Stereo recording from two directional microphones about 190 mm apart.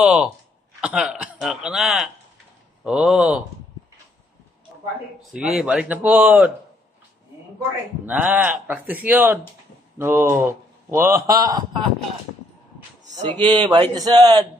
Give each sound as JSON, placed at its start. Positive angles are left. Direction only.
{"t": 0.0, "sound": "a sound", "side_deg": -5}
{"t": 0.7, "sound": "a man's voice", "side_deg": -5}
{"t": 5.2, "sound": "a man's voice", "side_deg": 0}
{"t": 8.1, "sound": "a man's voice", "side_deg": -10}
{"t": 13.6, "sound": "speech", "side_deg": -20}